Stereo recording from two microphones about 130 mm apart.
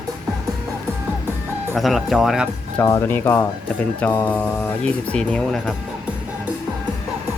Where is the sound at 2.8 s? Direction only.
20° left (ahead or behind).